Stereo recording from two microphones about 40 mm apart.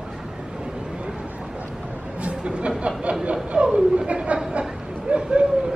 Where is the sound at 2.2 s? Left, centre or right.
Right.